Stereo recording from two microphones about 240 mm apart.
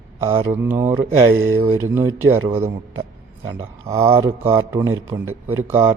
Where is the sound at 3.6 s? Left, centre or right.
Centre.